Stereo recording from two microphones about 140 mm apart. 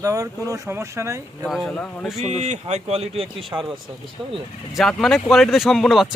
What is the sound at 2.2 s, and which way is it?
Speech, 55° right (ahead or behind).